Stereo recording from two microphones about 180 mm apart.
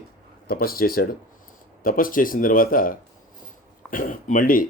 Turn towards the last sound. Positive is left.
turn(degrees=50)  # may be behind; listen again after turning